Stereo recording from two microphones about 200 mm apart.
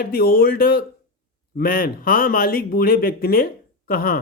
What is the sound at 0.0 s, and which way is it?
Speech, 45° left (ahead or behind).